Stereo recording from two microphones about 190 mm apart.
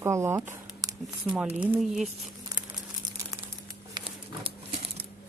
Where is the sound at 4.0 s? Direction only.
25° right (ahead or behind).